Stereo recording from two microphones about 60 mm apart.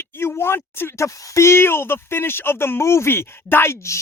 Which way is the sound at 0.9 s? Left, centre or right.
Left.